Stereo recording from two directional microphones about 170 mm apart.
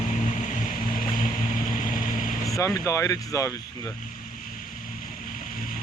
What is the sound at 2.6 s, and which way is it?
Speech, 15° left (ahead or behind).